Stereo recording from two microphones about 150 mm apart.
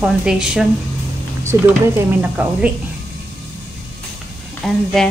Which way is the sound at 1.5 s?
20° right (ahead or behind).